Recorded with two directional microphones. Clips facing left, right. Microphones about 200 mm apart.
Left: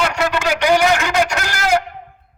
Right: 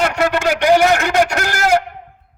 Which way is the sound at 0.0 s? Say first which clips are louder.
Right 2 dB; 50° right (ahead or behind).